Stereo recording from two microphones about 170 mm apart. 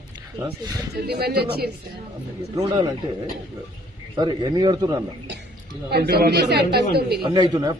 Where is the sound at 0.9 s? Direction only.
65° right (ahead or behind).